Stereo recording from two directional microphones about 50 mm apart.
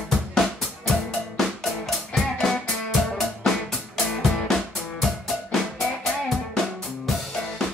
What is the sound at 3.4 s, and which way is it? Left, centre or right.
Music, centre.